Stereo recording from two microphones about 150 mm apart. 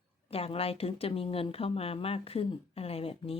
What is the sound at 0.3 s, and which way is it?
Speech, 40° left (ahead or behind).